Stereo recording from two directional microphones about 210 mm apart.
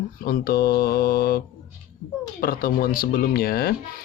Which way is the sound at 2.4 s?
45° left (ahead or behind).